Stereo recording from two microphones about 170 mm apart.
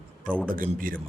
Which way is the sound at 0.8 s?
55° right (ahead or behind).